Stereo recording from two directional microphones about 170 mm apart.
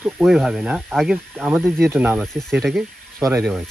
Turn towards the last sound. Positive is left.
turn(degrees=-15)  # may be behind; listen again after turning